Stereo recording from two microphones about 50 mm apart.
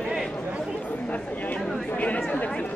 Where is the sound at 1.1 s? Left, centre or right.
Left.